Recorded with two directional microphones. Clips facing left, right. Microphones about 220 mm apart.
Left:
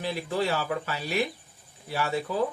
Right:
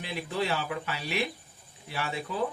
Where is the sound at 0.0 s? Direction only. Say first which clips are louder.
Left 4 dB; 40° left (ahead or behind).